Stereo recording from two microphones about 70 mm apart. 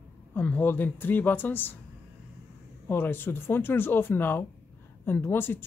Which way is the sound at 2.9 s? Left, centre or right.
Left.